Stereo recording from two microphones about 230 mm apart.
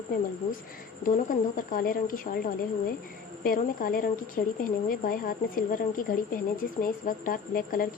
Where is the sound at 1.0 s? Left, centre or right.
Left.